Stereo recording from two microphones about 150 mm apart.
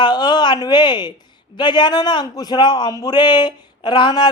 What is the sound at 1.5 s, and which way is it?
A man's voice, 30° left (ahead or behind).